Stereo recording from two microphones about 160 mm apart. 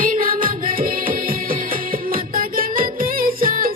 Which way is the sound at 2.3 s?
60° right (ahead or behind).